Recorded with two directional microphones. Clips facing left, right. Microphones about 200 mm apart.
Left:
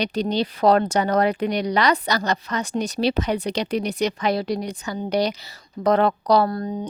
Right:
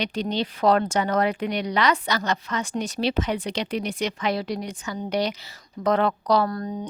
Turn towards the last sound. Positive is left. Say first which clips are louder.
# left 3 dB
turn(degrees=30)  # may be behind; listen again after turning